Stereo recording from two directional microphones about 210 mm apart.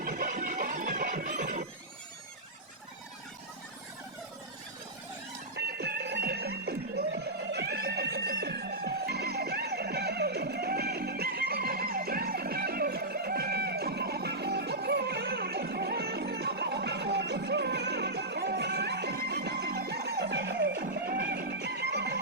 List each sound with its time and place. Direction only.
0.0 s music: 45° right (ahead or behind)
5.5 s music: 50° right (ahead or behind)